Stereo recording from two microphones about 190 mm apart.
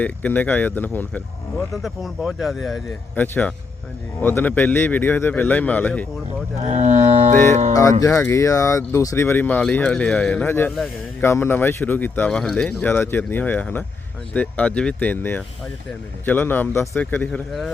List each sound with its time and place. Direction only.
0.0 s speech: 10° left (ahead or behind)
3.2 s speech: 10° left (ahead or behind)
6.6 s speech: 35° right (ahead or behind)
7.7 s speech: 15° left (ahead or behind)